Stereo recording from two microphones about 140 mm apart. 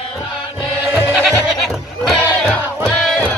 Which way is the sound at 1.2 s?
Centre (ahead or behind).